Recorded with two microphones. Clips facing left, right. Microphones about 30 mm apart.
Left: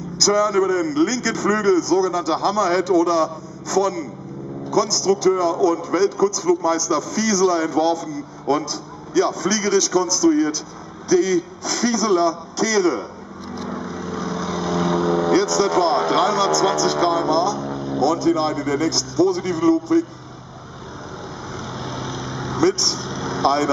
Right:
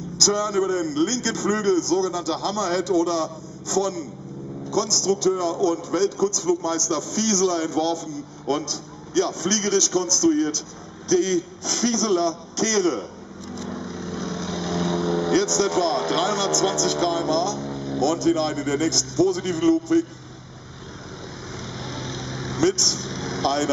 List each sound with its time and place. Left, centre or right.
0.2 s a man's voice: centre
13.7 s vehicle: centre
15.3 s a man's voice: left
17.6 s vehicle: centre
18.0 s a man's voice: centre
21.7 s vehicle: centre
22.6 s speech: left
23.0 s vehicle: centre
23.4 s speech: centre